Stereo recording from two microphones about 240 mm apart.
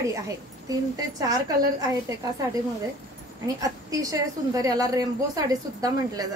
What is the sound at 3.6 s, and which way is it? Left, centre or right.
A woman's voice, centre.